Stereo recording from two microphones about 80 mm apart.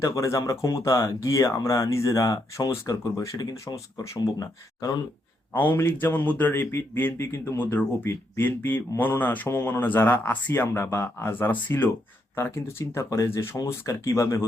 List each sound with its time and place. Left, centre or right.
0.0 s speech: left
5.5 s speech: left
9.6 s speech: left